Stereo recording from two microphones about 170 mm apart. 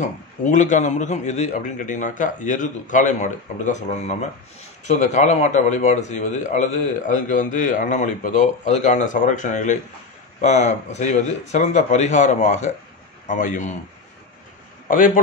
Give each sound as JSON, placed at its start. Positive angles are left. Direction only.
{"t": 0.0, "sound": "a man's voice", "side_deg": 45}
{"t": 14.9, "sound": "a man's voice", "side_deg": 50}